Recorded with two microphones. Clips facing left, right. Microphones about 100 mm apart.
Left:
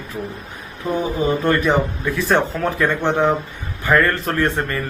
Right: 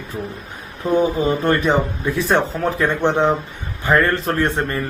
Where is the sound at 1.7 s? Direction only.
20° right (ahead or behind).